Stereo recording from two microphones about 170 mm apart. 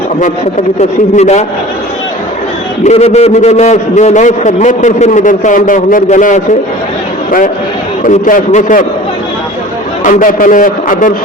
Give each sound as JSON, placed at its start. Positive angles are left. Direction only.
{"t": 0.8, "sound": "a man's voice", "side_deg": 40}
{"t": 2.8, "sound": "a man's voice", "side_deg": 40}
{"t": 10.0, "sound": "a man's voice", "side_deg": 50}